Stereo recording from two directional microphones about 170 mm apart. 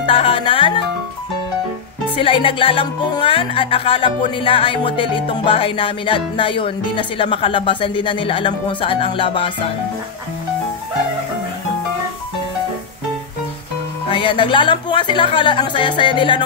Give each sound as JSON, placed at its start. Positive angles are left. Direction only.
{"t": 0.0, "sound": "music", "side_deg": 30}
{"t": 2.1, "sound": "music", "side_deg": 30}
{"t": 14.0, "sound": "speech", "side_deg": 30}